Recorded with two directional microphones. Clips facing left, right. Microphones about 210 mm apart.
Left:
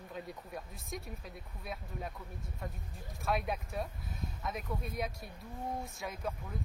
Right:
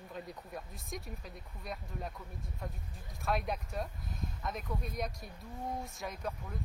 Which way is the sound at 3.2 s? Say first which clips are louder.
Even; centre (ahead or behind).